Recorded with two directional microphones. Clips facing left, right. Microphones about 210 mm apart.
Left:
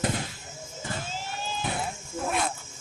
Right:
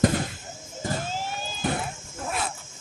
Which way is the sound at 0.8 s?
40° right (ahead or behind).